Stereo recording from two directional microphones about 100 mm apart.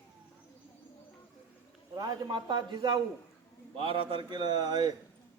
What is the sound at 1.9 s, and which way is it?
A man's voice, 40° right (ahead or behind).